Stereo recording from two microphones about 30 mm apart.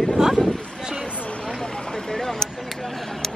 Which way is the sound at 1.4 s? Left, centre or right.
Centre.